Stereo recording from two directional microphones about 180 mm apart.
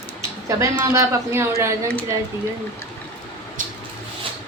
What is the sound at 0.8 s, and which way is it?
Speech, 15° right (ahead or behind).